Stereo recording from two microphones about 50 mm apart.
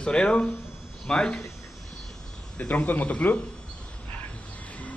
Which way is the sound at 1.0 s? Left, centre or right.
Centre.